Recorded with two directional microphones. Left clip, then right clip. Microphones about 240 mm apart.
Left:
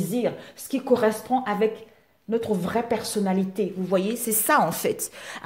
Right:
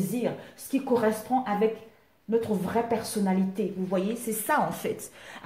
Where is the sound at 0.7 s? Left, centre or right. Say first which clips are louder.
Left 4 dB; left.